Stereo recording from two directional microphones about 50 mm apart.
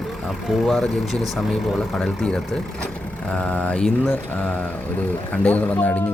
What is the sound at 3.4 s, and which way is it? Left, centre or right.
A man's voice, left.